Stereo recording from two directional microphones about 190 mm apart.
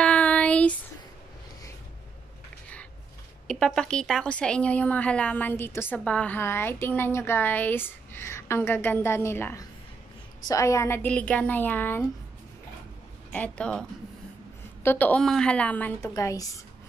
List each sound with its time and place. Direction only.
0.0 s a sound: 5° left (ahead or behind)
3.4 s a woman's voice: 5° left (ahead or behind)
13.3 s a woman's voice: 5° left (ahead or behind)